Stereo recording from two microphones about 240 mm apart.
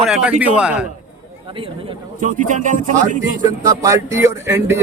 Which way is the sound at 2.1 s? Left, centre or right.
Right.